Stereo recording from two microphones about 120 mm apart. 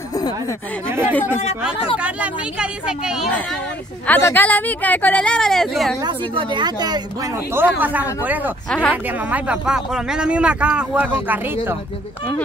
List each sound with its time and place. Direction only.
0.8 s speech: 20° right (ahead or behind)
4.2 s speech: 15° left (ahead or behind)
6.0 s speech: 40° right (ahead or behind)
7.5 s speech: 15° right (ahead or behind)
8.6 s speech: 5° left (ahead or behind)
9.3 s speech: 10° right (ahead or behind)